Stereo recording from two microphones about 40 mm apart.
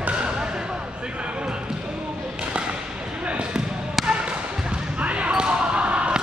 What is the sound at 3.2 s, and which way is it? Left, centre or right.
Basketball bounce, right.